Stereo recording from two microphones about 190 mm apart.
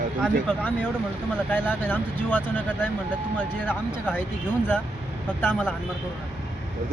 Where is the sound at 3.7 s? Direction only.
5° right (ahead or behind).